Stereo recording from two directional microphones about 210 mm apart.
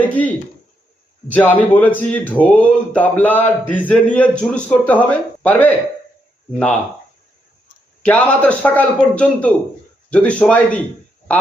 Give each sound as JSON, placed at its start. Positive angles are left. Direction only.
{"t": 0.1, "sound": "speech", "side_deg": 5}
{"t": 8.0, "sound": "a man's voice", "side_deg": 5}